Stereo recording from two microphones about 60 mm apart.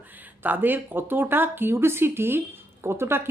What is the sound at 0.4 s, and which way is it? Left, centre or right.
Speech, right.